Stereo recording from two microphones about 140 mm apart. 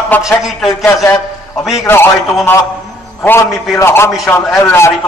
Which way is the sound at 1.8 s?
15° left (ahead or behind).